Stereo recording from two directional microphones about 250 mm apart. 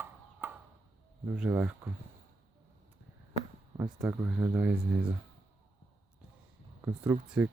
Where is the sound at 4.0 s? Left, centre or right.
Centre.